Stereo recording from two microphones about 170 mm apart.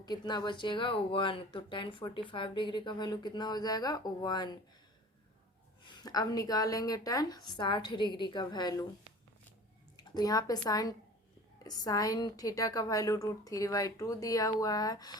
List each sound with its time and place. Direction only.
0.0 s speech: 25° left (ahead or behind)
5.8 s speech: 25° left (ahead or behind)
10.0 s speech: 25° left (ahead or behind)